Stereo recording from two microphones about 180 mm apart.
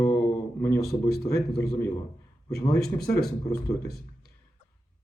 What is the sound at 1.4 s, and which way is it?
Speech, 15° left (ahead or behind).